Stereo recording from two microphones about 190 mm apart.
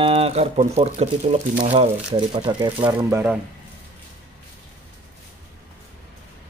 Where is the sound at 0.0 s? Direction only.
30° right (ahead or behind); by 3.3 s 10° right (ahead or behind).